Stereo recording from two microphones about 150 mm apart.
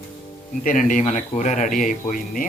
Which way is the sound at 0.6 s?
60° left (ahead or behind).